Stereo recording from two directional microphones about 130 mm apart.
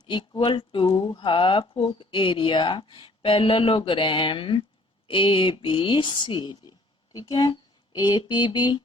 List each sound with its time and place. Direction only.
0.0 s speech: 35° left (ahead or behind)